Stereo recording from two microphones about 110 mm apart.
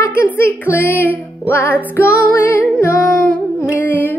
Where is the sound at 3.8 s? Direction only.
20° left (ahead or behind).